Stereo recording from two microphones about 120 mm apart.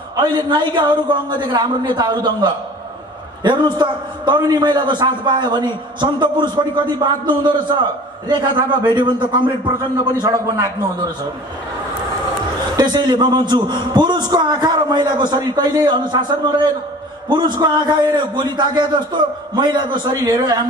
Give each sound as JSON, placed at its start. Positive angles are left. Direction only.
{"t": 0.1, "sound": "a man's voice", "side_deg": -35}
{"t": 10.2, "sound": "a man's voice", "side_deg": -25}
{"t": 12.7, "sound": "a man's voice", "side_deg": -35}